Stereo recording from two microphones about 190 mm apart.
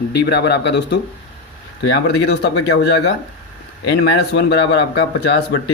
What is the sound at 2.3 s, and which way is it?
Speech, 60° left (ahead or behind).